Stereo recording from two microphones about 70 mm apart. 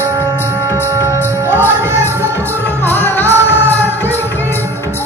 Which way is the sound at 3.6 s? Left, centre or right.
Right.